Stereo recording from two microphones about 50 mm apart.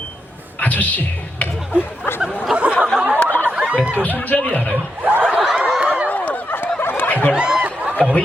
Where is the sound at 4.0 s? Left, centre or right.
Left.